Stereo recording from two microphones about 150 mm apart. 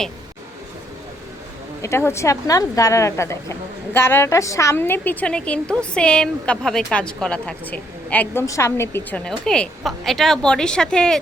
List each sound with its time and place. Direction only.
1.8 s a woman's voice: 20° left (ahead or behind)